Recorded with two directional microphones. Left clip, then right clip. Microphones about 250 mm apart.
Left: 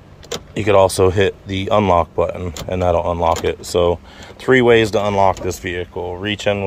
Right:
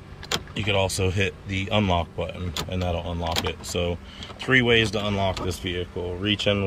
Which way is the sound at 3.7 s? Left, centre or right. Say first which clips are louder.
Left 12 dB; left.